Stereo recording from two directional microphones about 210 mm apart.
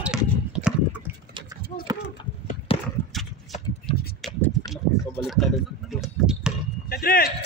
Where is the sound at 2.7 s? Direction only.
25° left (ahead or behind).